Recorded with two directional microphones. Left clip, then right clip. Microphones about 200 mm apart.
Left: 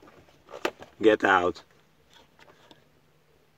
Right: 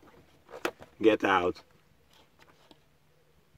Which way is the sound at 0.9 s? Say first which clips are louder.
Left 4 dB; 5° left (ahead or behind).